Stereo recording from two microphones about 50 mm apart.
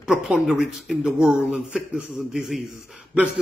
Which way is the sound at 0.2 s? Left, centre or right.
Centre.